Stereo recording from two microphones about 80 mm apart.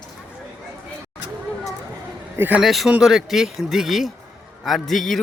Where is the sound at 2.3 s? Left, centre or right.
Right.